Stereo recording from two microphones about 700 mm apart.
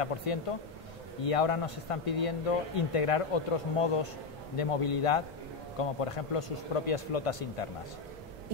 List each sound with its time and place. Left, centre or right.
0.0 s speech: left